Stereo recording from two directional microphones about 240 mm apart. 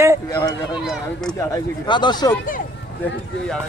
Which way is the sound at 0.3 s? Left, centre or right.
Centre.